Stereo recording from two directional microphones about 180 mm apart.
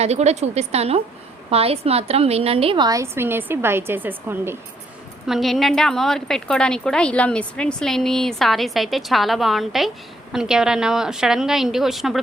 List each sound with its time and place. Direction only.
0.0 s a woman's voice: 35° right (ahead or behind); by 4.5 s 10° right (ahead or behind)
5.2 s a woman's voice: centre (ahead or behind)